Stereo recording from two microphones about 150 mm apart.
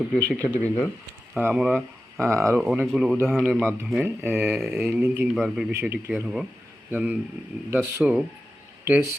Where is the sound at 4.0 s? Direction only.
15° right (ahead or behind).